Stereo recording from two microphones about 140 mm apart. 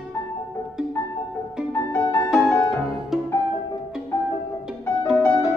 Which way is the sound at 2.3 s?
5° left (ahead or behind).